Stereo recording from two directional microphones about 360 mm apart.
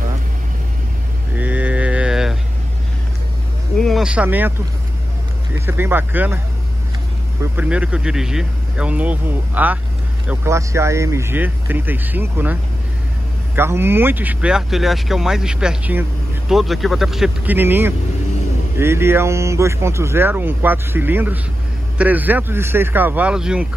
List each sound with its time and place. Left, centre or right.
1.3 s mantra: centre
3.8 s speech: centre
7.5 s speech: centre
13.6 s speech: centre